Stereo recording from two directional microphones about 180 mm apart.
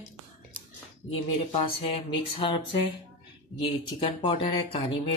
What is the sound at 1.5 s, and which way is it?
Speech, 30° left (ahead or behind).